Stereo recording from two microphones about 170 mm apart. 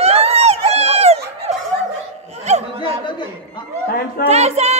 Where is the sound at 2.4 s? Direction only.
40° right (ahead or behind).